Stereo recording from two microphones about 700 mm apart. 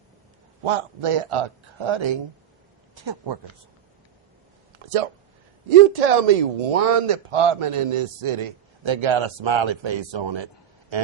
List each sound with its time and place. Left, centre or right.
0.6 s speech: right
6.0 s speech: right